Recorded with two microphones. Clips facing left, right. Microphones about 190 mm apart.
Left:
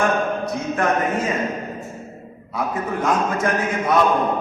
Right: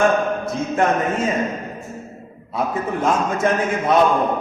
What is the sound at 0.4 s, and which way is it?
Speech, 25° right (ahead or behind).